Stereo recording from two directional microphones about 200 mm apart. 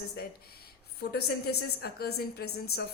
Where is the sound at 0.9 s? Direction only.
50° left (ahead or behind).